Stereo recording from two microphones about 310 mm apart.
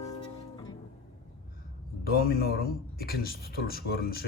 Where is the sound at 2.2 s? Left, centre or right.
Left.